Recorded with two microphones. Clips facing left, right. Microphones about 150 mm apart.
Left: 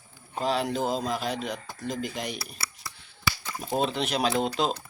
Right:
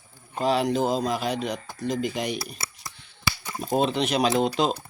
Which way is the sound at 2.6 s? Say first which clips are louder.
Right 1 dB; 20° right (ahead or behind).